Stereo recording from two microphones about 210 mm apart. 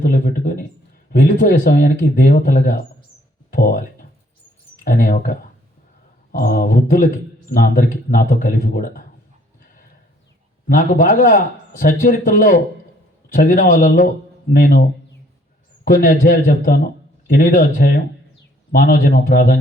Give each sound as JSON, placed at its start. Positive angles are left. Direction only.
{"t": 0.0, "sound": "a man's voice", "side_deg": 40}
{"t": 10.7, "sound": "a man's voice", "side_deg": 40}